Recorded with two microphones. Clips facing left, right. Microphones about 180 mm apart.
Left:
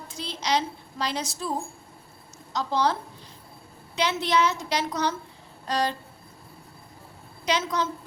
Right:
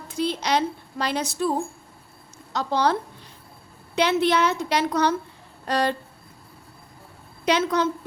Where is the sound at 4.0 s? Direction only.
60° right (ahead or behind).